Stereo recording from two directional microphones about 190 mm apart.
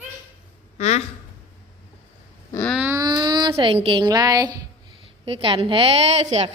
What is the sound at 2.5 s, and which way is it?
Wail, 10° left (ahead or behind).